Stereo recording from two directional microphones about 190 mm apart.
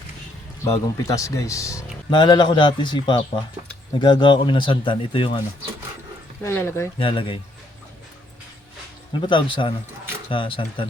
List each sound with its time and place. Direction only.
0.6 s speech: 15° left (ahead or behind)
6.4 s speech: 15° left (ahead or behind)
7.0 s speech: 25° left (ahead or behind)
9.2 s speech: 25° left (ahead or behind)